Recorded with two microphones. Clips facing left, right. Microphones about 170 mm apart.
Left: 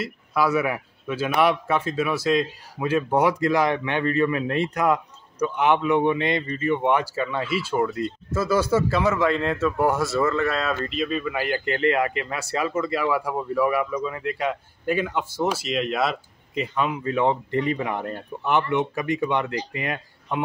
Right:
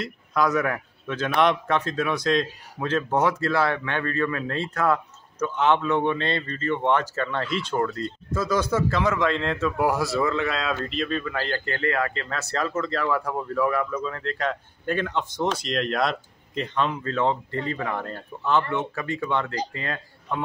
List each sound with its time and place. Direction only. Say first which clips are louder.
0.0 s a man's voice: left 1 dB; 5° left (ahead or behind)